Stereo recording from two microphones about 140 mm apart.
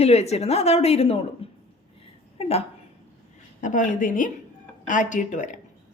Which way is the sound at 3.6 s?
65° left (ahead or behind).